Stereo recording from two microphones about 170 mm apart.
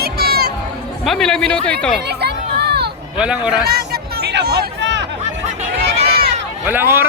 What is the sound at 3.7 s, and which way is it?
Hubbub, 70° right (ahead or behind).